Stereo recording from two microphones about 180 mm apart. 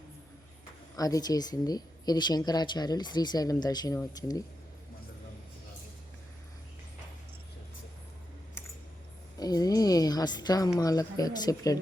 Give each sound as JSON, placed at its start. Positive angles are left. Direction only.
{"t": 0.9, "sound": "speech", "side_deg": 20}
{"t": 9.4, "sound": "a woman's voice", "side_deg": 20}